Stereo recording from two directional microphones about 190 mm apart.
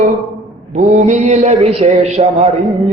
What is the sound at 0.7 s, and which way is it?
A man's voice, 40° right (ahead or behind).